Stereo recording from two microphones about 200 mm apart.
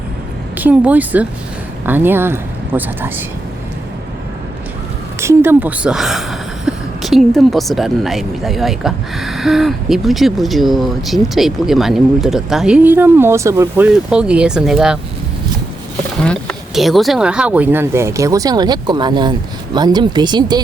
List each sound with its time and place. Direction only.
0.5 s speech: 10° right (ahead or behind)
5.2 s a woman's voice: 10° right (ahead or behind)
16.2 s speech: 5° left (ahead or behind); by 20.6 s 20° right (ahead or behind)